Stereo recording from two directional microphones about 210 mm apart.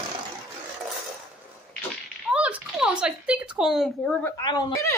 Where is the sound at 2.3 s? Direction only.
5° right (ahead or behind).